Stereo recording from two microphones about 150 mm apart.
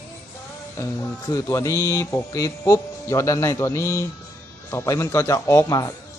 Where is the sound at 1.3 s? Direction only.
25° left (ahead or behind).